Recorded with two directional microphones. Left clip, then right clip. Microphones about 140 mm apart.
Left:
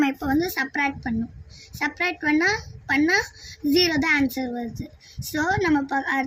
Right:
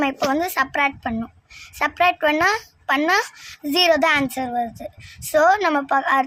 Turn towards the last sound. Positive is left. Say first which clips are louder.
# right 5 dB
turn(degrees=-50)  # may be behind; listen again after turning